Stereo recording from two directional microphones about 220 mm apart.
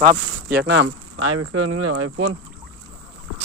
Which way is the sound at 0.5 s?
50° right (ahead or behind).